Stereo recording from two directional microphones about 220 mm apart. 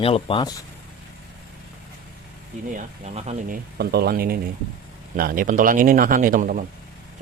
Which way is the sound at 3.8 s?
45° right (ahead or behind).